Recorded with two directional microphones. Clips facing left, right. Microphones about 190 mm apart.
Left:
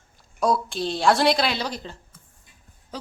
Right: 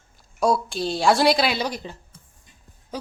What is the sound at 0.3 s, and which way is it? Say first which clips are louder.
A woman's voice: right 1 dB; centre (ahead or behind).